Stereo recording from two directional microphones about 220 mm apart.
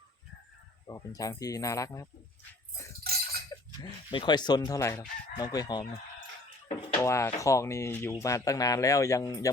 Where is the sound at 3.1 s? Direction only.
45° right (ahead or behind).